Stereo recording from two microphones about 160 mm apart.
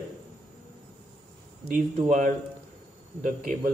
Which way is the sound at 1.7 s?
55° right (ahead or behind).